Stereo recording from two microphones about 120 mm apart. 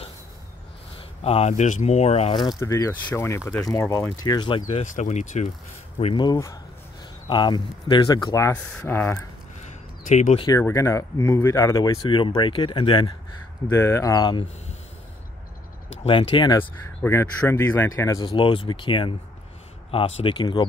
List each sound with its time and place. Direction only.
1.2 s speech: 60° left (ahead or behind)
2.6 s speech: 25° left (ahead or behind)
4.5 s speech: 45° left (ahead or behind)
4.9 s speech: 80° left
6.1 s speech: 35° left (ahead or behind)
8.8 s speech: 15° left (ahead or behind)
10.0 s speech: 90° left
10.6 s speech: 25° left (ahead or behind)
12.1 s speech: 40° left (ahead or behind)
13.7 s speech: 25° left (ahead or behind)
16.1 s speech: 45° left (ahead or behind)
17.0 s speech: 20° left (ahead or behind)
18.2 s speech: 45° left (ahead or behind)